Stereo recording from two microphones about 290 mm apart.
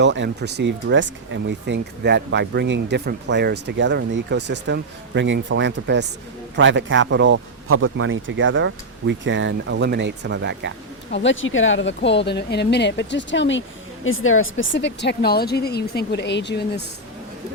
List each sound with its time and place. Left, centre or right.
0.0 s speech: right
11.1 s speech: left